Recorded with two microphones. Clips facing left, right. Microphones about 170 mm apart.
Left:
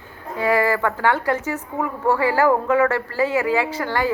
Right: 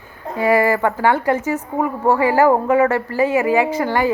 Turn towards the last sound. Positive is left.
turn(degrees=-15)  # may be behind; listen again after turning